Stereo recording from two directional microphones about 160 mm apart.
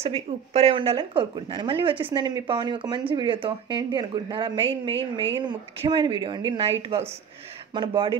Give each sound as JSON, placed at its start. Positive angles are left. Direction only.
{"t": 0.0, "sound": "speech", "side_deg": -40}